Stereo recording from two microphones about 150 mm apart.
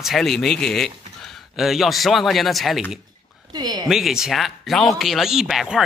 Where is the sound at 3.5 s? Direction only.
30° right (ahead or behind).